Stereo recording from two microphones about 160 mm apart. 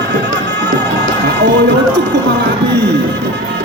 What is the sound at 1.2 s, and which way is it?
Music, 90° right.